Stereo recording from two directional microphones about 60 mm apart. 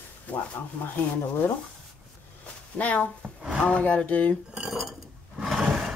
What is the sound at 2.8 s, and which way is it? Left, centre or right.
Speech, left.